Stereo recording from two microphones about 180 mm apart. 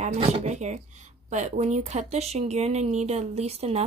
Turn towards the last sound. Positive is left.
turn(degrees=-35)  # may be behind; listen again after turning